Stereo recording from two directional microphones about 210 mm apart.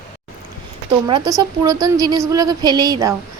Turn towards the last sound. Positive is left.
turn(degrees=-15)  # may be behind; listen again after turning